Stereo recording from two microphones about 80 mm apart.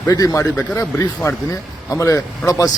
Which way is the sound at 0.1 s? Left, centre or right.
Left.